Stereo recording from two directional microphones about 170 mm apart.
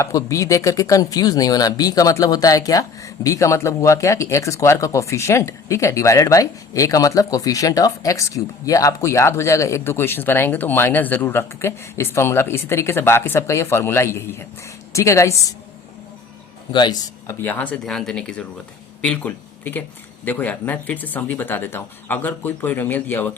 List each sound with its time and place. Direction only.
0.0 s speech: 20° left (ahead or behind)
16.7 s speech: 25° left (ahead or behind)
17.4 s speech: 10° left (ahead or behind)